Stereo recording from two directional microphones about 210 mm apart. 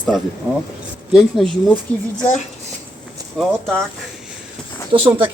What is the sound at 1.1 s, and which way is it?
Speech, centre (ahead or behind).